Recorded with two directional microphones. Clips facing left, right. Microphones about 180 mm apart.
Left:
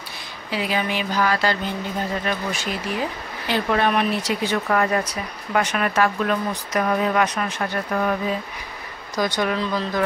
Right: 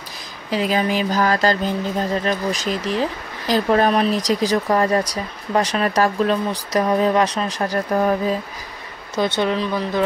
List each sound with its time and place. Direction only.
0.5 s speech: 40° right (ahead or behind)
9.4 s speech: 20° right (ahead or behind)